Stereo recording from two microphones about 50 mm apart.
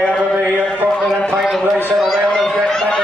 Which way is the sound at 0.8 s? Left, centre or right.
Centre.